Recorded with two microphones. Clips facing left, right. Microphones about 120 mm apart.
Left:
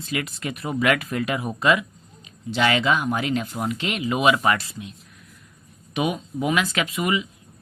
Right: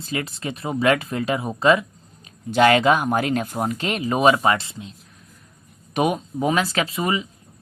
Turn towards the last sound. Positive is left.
turn(degrees=-35)  # may be behind; listen again after turning